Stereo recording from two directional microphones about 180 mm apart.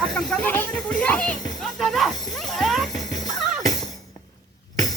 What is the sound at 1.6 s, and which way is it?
Music, centre (ahead or behind).